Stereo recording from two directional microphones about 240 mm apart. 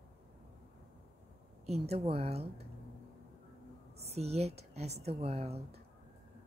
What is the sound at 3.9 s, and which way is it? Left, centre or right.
A woman's voice, right.